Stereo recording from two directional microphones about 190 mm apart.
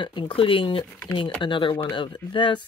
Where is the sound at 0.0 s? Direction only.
25° left (ahead or behind).